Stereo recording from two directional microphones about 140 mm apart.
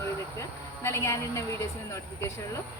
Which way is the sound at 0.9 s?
20° left (ahead or behind).